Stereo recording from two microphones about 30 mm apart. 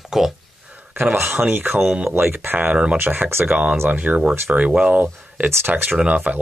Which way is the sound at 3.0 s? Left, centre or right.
Right.